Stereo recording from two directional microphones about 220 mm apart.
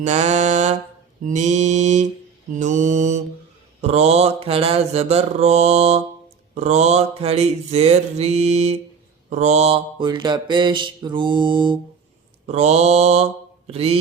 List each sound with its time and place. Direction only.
0.0 s mantra: 30° right (ahead or behind)